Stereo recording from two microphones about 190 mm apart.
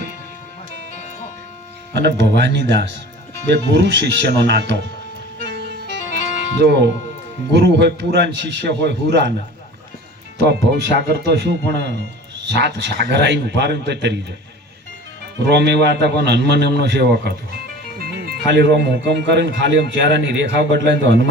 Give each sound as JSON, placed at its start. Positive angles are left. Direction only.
{"t": 1.9, "sound": "speech", "side_deg": -65}
{"t": 5.4, "sound": "music", "side_deg": -65}
{"t": 6.6, "sound": "speech", "side_deg": -65}
{"t": 10.4, "sound": "speech", "side_deg": -65}
{"t": 15.4, "sound": "speech", "side_deg": -65}